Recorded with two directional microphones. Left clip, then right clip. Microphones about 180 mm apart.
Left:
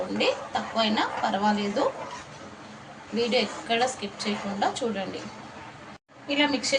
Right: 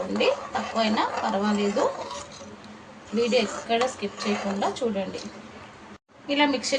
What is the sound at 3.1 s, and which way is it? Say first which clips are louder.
Speech: right 2 dB; 10° right (ahead or behind).